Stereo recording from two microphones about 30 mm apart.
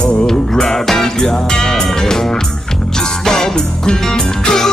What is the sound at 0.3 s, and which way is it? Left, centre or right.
Music, centre.